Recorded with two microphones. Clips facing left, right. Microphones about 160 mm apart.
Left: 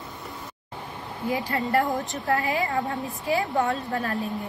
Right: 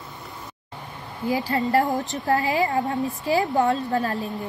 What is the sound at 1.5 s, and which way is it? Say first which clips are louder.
A woman's voice: right 3 dB; 30° right (ahead or behind).